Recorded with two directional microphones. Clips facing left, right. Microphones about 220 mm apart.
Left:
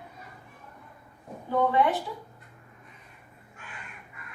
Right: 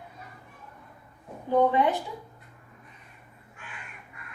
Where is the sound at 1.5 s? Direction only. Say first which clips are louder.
Right 3 dB; 20° right (ahead or behind).